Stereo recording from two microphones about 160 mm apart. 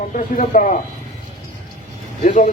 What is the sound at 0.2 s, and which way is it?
Speech, 55° left (ahead or behind).